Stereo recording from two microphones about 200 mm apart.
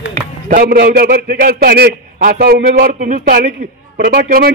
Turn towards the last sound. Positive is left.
turn(degrees=-50)  # may be behind; listen again after turning